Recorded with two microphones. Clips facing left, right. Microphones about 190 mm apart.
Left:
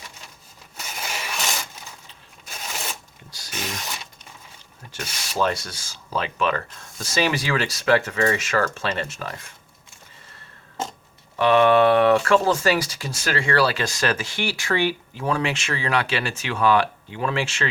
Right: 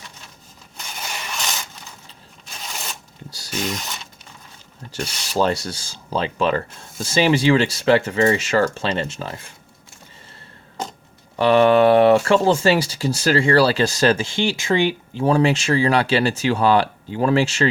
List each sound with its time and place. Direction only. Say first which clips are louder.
0.8 s rub: even; 5° left (ahead or behind)
2.5 s zipper: left 1 dB; 5° left (ahead or behind)
4.9 s speech: right 4 dB; 30° right (ahead or behind)
11.3 s speech: right 2 dB; 35° right (ahead or behind)